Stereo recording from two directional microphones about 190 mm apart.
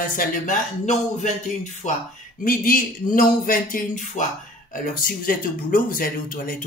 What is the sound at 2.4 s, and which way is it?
Speech, 45° left (ahead or behind).